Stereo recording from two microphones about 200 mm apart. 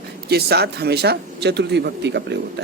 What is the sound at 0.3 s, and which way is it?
Speech, 55° right (ahead or behind).